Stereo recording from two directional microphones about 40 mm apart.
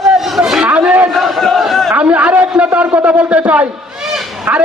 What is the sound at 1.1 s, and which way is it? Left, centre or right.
Crowd, centre.